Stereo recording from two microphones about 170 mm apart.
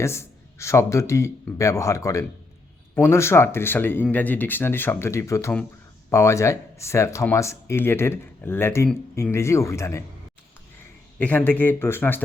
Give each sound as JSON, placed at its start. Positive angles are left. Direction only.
{"t": 0.0, "sound": "speech", "side_deg": 15}
{"t": 11.2, "sound": "speech", "side_deg": 10}